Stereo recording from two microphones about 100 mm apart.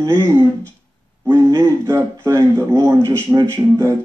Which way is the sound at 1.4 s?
30° right (ahead or behind).